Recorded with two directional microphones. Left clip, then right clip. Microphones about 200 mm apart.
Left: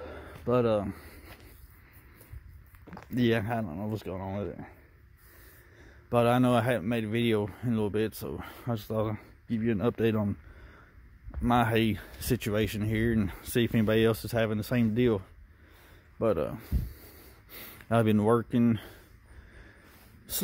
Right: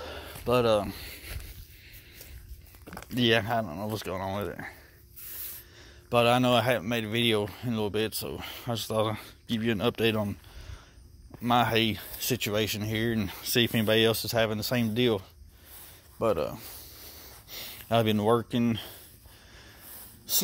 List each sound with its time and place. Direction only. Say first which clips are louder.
0.0 s a sound: right 2 dB; 30° left (ahead or behind)
3.2 s a man's voice: right 4 dB; 30° left (ahead or behind)
5.8 s a man's voice: right 2 dB; 30° left (ahead or behind)
11.4 s speech: right 2 dB; 30° left (ahead or behind)